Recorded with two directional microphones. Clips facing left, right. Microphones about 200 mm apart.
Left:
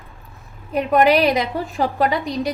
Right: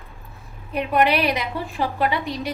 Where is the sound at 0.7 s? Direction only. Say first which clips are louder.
Left 4 dB; 45° left (ahead or behind).